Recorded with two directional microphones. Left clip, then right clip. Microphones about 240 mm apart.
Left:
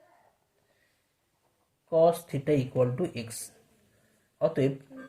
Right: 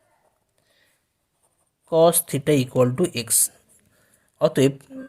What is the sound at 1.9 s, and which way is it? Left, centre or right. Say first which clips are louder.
Speech: right 6 dB; right.